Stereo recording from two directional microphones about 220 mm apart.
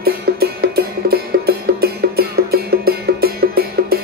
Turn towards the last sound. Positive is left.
turn(degrees=-45)  # may be behind; listen again after turning